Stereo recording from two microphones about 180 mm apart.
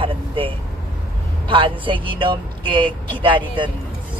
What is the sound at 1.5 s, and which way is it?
Speech, 30° right (ahead or behind).